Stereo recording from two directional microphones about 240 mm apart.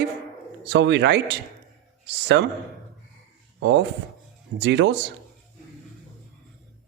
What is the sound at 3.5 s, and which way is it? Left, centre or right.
A man's voice, right.